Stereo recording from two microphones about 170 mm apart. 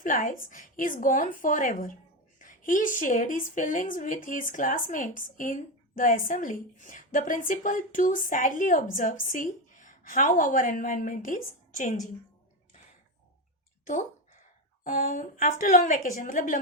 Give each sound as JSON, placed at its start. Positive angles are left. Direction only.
{"t": 0.0, "sound": "speech", "side_deg": 50}
{"t": 14.8, "sound": "speech", "side_deg": 50}